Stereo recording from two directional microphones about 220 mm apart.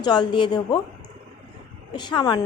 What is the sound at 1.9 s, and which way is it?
Speech, 20° left (ahead or behind).